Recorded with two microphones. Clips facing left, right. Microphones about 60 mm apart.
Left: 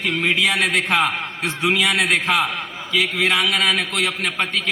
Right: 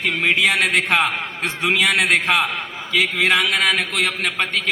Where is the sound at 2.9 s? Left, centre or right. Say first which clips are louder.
Right 2 dB; right.